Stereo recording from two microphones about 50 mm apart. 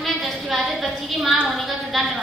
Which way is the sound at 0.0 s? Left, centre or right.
Centre.